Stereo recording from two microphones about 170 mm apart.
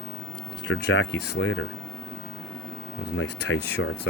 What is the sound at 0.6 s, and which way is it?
Speech, 90° left.